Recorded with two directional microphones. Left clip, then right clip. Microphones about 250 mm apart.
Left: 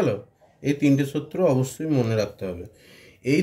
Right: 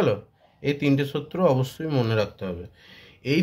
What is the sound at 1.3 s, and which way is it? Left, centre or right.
Speech, right.